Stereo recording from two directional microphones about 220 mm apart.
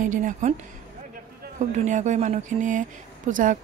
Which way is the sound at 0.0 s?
35° right (ahead or behind).